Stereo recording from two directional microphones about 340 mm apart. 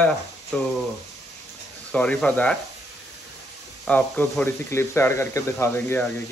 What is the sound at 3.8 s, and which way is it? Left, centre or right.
Speech, centre.